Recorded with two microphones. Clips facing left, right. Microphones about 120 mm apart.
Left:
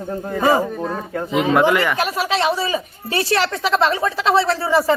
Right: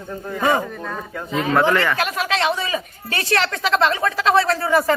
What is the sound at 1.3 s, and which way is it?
A woman's voice, 15° left (ahead or behind).